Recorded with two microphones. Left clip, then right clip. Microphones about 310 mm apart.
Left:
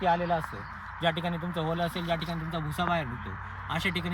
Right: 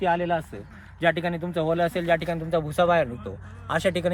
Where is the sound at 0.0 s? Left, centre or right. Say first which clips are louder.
Right 3 dB; centre.